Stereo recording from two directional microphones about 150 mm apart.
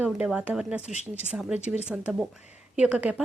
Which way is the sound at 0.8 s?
50° left (ahead or behind).